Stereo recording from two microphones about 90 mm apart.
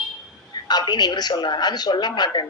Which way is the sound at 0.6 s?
50° left (ahead or behind).